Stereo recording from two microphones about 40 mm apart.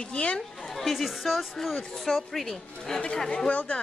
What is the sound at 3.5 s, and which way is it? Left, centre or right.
Speech, left.